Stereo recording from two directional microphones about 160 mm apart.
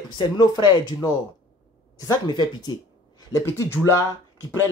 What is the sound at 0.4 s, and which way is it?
Speech, 25° left (ahead or behind).